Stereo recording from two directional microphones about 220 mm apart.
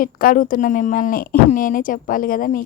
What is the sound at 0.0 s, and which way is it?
A woman's voice, 40° left (ahead or behind).